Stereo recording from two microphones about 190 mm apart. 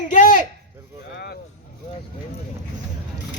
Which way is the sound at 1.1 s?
55° left (ahead or behind).